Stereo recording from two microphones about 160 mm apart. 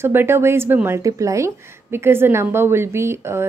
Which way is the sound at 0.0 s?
15° right (ahead or behind).